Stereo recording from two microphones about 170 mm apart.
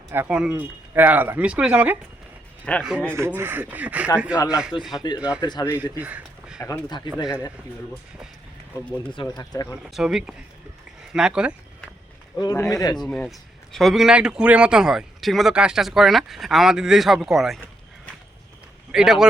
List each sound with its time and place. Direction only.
0.1 s speech: 10° right (ahead or behind)
2.7 s speech: 5° left (ahead or behind)
3.2 s speech: 15° right (ahead or behind)
4.9 s speech: 25° left (ahead or behind)
6.0 s a sound: 10° right (ahead or behind)
6.6 s speech: 20° left (ahead or behind)
9.1 s speech: 25° left (ahead or behind)
9.9 s speech: centre (ahead or behind)
12.4 s speech: 20° left (ahead or behind)
13.0 s speech: 5° left (ahead or behind)
18.9 s speech: centre (ahead or behind)